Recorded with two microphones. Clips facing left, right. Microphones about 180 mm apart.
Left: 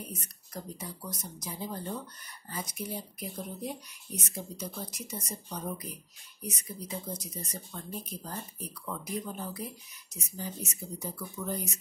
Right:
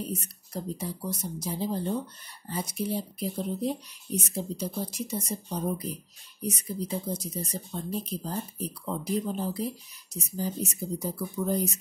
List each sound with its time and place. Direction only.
0.0 s speech: 30° right (ahead or behind)